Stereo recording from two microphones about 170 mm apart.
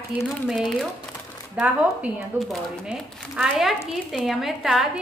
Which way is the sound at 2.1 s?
Centre (ahead or behind).